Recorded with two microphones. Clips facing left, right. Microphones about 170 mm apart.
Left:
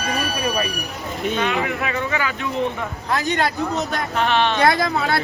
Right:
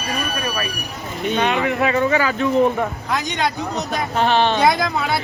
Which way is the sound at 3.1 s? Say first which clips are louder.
Left 6 dB; centre (ahead or behind).